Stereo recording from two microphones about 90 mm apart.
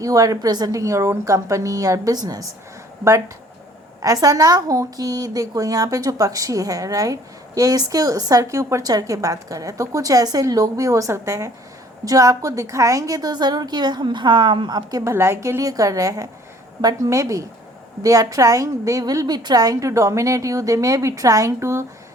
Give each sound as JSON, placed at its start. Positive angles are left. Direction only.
{"t": 0.0, "sound": "a woman's voice", "side_deg": -40}
{"t": 4.0, "sound": "a woman's voice", "side_deg": -40}
{"t": 15.0, "sound": "a woman's voice", "side_deg": -30}